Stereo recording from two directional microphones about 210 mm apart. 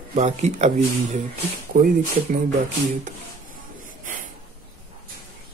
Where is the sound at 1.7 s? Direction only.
45° right (ahead or behind).